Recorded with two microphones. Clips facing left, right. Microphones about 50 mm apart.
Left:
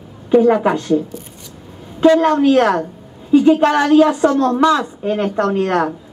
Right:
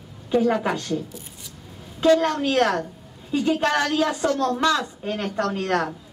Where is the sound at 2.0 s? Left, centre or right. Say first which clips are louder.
Left 7 dB; left.